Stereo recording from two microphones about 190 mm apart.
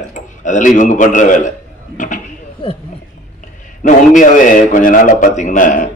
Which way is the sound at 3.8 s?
45° left (ahead or behind).